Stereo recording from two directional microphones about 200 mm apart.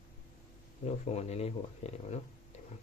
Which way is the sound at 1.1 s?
30° left (ahead or behind).